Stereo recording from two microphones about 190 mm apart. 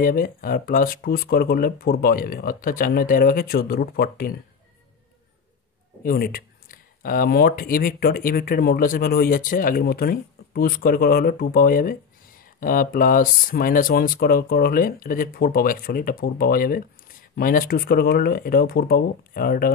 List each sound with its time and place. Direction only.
0.0 s speech: 50° left (ahead or behind)
6.0 s speech: 50° left (ahead or behind)